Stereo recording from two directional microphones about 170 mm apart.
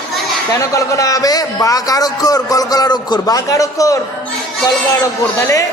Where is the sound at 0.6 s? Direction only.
20° left (ahead or behind).